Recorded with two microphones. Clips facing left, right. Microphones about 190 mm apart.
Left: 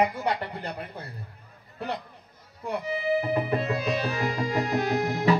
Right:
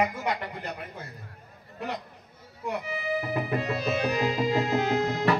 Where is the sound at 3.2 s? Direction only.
30° left (ahead or behind).